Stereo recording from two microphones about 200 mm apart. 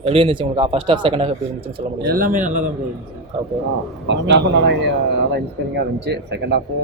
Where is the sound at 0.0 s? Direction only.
25° right (ahead or behind).